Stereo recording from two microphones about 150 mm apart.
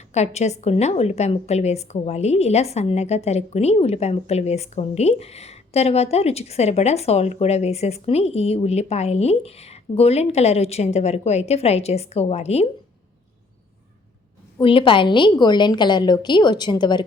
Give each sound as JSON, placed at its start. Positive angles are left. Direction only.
{"t": 0.1, "sound": "a woman's voice", "side_deg": 50}
{"t": 14.6, "sound": "a woman's voice", "side_deg": 35}